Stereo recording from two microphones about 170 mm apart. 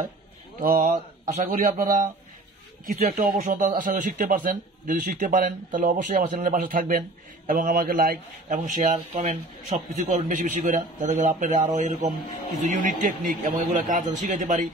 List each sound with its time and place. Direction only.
0.6 s a man's voice: 55° right (ahead or behind)